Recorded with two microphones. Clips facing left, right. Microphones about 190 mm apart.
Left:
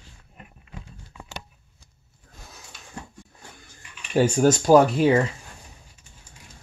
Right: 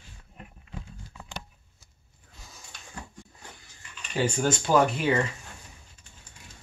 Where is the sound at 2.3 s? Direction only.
60° left (ahead or behind).